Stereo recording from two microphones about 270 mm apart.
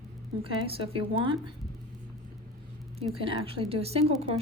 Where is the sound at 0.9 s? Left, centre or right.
Centre.